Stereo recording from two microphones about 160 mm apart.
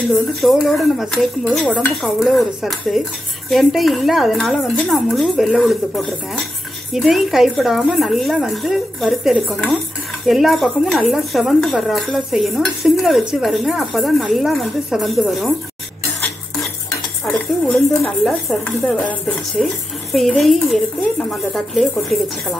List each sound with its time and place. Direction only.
0.4 s speech: centre (ahead or behind)
17.3 s speech: 5° left (ahead or behind)